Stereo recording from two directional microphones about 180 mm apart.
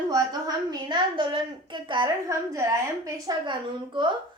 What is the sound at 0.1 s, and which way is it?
A woman's voice, 20° right (ahead or behind).